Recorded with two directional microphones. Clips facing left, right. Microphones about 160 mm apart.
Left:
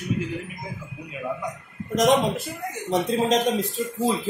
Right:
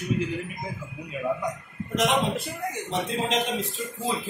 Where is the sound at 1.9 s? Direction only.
40° left (ahead or behind).